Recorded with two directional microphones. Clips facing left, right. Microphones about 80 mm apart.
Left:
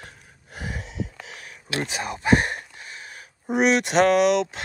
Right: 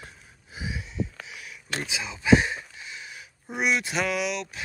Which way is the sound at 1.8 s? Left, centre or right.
Left.